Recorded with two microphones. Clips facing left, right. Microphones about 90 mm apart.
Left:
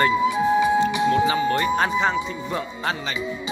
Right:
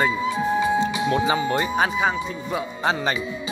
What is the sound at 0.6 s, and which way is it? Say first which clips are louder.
Speech: left 2 dB; 25° right (ahead or behind).